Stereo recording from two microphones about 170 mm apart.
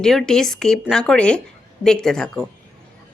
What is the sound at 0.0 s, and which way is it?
A woman's voice, centre (ahead or behind).